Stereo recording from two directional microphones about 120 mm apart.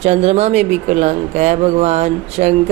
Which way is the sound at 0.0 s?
65° right (ahead or behind).